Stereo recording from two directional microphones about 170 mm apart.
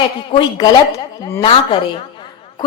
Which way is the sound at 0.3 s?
30° left (ahead or behind).